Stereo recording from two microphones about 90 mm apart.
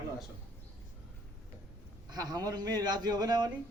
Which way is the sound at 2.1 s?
45° right (ahead or behind).